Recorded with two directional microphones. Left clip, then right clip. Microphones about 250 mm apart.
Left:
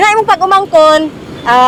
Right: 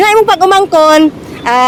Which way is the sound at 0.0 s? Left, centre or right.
Right.